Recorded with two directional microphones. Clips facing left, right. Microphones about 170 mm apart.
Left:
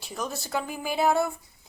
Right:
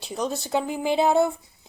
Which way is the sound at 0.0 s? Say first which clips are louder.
Right 5 dB; 25° right (ahead or behind).